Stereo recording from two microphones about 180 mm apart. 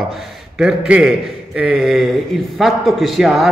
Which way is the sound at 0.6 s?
5° right (ahead or behind).